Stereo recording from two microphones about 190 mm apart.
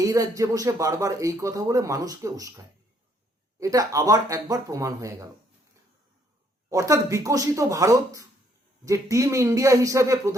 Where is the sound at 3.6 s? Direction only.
20° right (ahead or behind).